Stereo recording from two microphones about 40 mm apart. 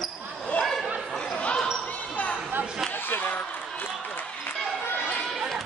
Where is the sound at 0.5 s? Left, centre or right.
Left.